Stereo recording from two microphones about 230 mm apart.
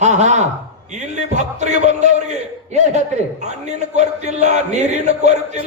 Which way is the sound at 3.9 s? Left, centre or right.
Right.